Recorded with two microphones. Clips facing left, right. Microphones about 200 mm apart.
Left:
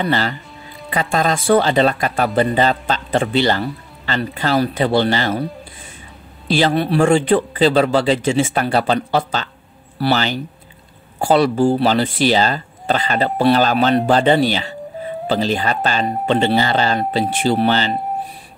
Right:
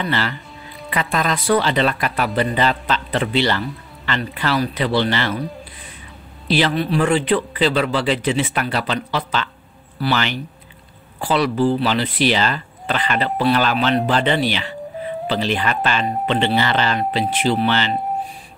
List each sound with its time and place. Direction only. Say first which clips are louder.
0.0 s speech: left 3 dB; 40° left (ahead or behind)
1.5 s speech: left 4 dB; 45° left (ahead or behind)
2.2 s speech: left 4 dB; 45° left (ahead or behind)
6.4 s speech: left 2 dB; 50° left (ahead or behind)